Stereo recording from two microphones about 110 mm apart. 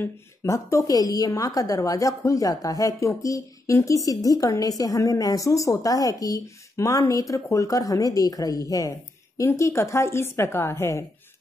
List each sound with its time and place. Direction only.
0.0 s a woman's voice: 25° left (ahead or behind)